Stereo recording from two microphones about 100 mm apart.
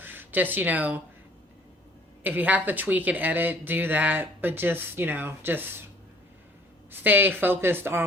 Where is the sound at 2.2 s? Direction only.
20° right (ahead or behind).